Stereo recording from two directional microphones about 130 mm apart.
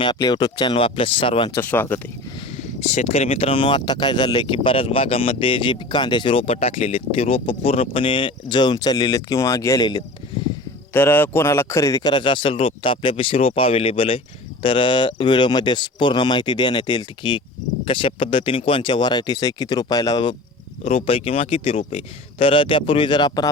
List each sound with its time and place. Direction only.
0.0 s speech: 35° left (ahead or behind)
1.6 s speech: 15° left (ahead or behind)
2.6 s speech: 60° left (ahead or behind); by 10.0 s 30° left (ahead or behind)
10.9 s speech: 15° left (ahead or behind); by 20.3 s 35° left (ahead or behind)
20.8 s speech: 50° left (ahead or behind); by 23.5 s 35° left (ahead or behind)